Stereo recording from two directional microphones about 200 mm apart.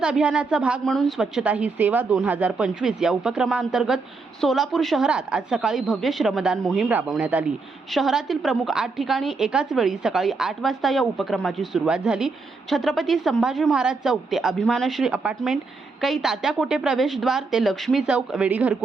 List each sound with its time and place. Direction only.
0.0 s a woman's voice: 5° right (ahead or behind)